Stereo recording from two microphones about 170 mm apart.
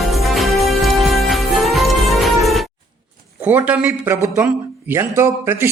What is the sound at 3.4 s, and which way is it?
Speech, 10° right (ahead or behind).